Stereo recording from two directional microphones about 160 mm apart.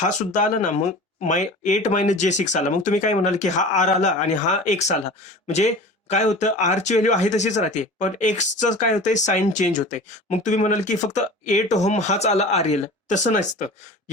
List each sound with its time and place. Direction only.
0.3 s speech: 50° left (ahead or behind)